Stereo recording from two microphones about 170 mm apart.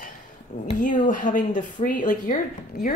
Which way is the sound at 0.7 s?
50° left (ahead or behind).